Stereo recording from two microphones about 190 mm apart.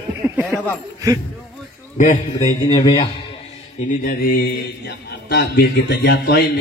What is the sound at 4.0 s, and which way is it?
A man's voice, 50° left (ahead or behind).